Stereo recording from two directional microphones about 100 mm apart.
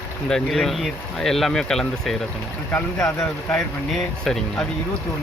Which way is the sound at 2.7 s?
25° left (ahead or behind).